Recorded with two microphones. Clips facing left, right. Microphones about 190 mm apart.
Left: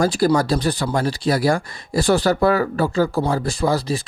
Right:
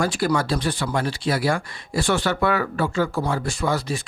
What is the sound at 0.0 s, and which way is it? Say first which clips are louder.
Speech: left 5 dB; 35° left (ahead or behind).